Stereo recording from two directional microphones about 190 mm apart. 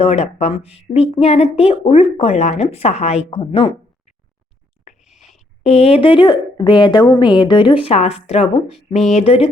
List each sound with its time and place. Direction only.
0.0 s speech: 35° left (ahead or behind)
4.9 s a sound: centre (ahead or behind)
5.4 s a woman's voice: 35° left (ahead or behind)